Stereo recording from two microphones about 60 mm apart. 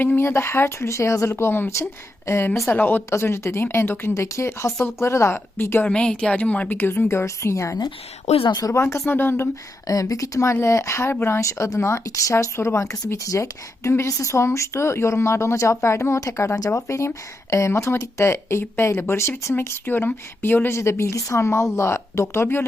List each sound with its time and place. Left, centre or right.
0.0 s speech: left
2.7 s speech: left
3.1 s speech: left
5.8 s a woman's voice: centre
6.7 s speech: left
9.0 s speech: left
9.8 s speech: left
11.3 s speech: left
19.8 s speech: left
20.7 s speech: left